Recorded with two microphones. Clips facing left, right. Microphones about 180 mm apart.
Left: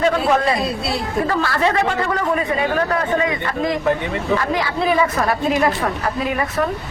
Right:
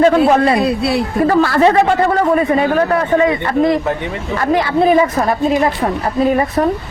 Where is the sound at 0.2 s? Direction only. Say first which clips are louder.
Right 6 dB; 65° right (ahead or behind).